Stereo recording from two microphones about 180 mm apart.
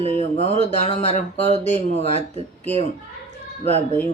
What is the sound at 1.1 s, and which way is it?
Music, 35° right (ahead or behind).